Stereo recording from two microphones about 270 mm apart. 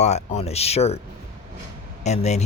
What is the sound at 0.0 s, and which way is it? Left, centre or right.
Speech, left.